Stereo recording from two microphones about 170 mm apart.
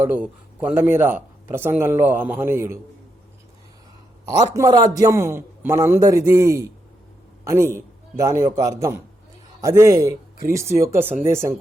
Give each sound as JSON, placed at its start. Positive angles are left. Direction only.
{"t": 0.0, "sound": "a man's voice", "side_deg": -10}
{"t": 4.5, "sound": "a man's voice", "side_deg": -20}